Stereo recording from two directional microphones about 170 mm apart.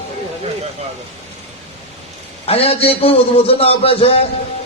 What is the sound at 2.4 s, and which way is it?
A man's voice, 35° left (ahead or behind).